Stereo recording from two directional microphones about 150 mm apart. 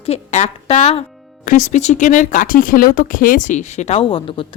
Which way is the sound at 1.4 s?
55° left (ahead or behind).